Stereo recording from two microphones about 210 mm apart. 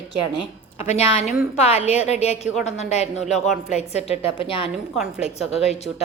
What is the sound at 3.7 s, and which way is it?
A woman's voice, 30° left (ahead or behind).